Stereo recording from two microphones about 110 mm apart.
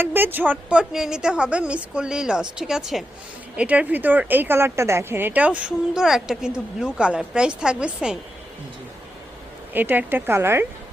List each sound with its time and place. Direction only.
0.0 s speech: 20° right (ahead or behind)
9.7 s a woman's voice: 15° right (ahead or behind)